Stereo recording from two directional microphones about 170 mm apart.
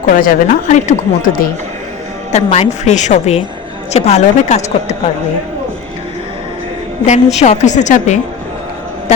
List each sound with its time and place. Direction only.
0.0 s speech: 55° left (ahead or behind)
2.3 s a woman's voice: 40° left (ahead or behind)
7.0 s speech: 40° left (ahead or behind)